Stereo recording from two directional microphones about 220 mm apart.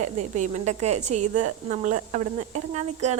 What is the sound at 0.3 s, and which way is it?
Speech, 30° right (ahead or behind).